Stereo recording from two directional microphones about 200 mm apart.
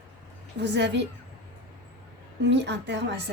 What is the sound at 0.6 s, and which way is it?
Speech, 60° right (ahead or behind).